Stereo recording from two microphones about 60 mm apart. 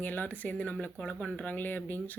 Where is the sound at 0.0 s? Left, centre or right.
Left.